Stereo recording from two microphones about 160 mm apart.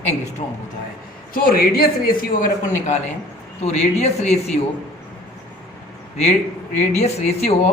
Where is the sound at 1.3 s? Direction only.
70° left (ahead or behind).